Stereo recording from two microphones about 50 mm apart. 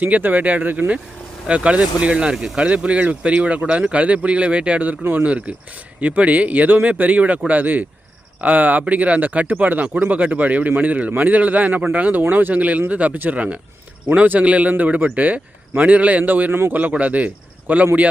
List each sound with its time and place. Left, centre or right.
0.0 s a man's voice: right
1.5 s speech: right
2.3 s speech: centre
2.6 s a man's voice: right